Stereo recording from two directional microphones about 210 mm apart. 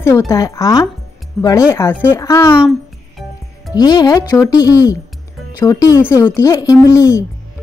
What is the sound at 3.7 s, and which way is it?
Speech, 20° left (ahead or behind).